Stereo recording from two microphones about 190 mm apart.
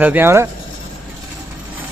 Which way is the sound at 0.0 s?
10° right (ahead or behind).